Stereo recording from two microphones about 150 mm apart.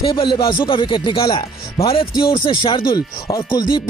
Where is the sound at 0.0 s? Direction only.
30° left (ahead or behind).